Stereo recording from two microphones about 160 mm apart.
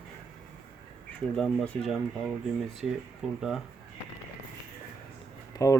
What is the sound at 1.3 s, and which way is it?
Speech, 5° left (ahead or behind).